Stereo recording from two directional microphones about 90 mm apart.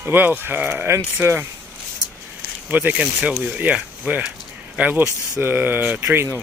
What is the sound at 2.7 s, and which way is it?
Speech, 20° right (ahead or behind).